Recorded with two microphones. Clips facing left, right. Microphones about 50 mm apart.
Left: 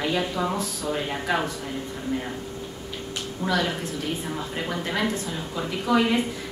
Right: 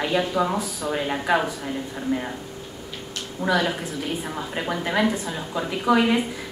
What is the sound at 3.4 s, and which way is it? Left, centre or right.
A woman's voice, centre.